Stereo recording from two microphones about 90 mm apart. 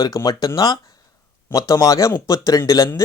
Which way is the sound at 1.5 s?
40° left (ahead or behind).